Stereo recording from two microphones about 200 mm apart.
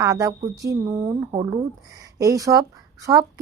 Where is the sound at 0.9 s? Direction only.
25° right (ahead or behind).